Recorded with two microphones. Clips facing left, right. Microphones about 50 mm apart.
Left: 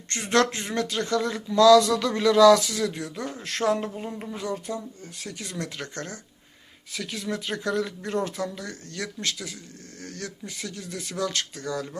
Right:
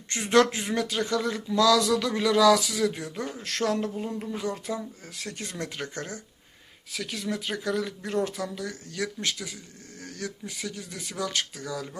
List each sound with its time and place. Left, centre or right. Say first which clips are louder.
0.1 s speech: right 1 dB; centre
3.3 s speech: left 3 dB; centre
4.7 s speech: even; centre
5.4 s speech: left 2 dB; right
5.6 s speech: even; centre
6.9 s speech: left 1 dB; centre